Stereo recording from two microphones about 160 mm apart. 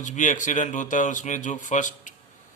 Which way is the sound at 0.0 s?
50° left (ahead or behind).